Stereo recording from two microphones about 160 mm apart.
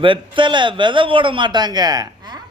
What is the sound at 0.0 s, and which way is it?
A woman's voice, 30° right (ahead or behind).